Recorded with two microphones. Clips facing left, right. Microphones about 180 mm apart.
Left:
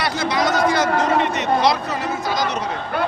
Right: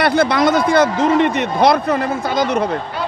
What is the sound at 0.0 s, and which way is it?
A man's voice, 55° right (ahead or behind).